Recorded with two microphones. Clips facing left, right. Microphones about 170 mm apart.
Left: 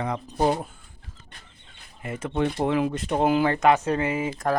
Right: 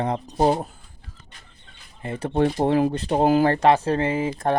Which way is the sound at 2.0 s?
30° right (ahead or behind).